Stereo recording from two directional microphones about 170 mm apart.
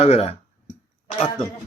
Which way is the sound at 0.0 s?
40° left (ahead or behind).